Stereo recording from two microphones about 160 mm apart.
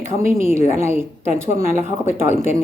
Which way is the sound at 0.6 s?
45° left (ahead or behind).